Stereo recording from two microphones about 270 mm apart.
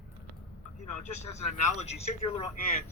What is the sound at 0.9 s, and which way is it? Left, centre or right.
Speech, left.